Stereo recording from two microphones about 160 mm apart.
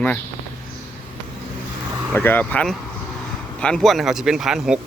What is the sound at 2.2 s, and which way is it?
Speech, 10° left (ahead or behind).